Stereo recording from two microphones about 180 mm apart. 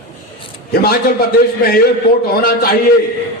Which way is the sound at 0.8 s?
55° left (ahead or behind).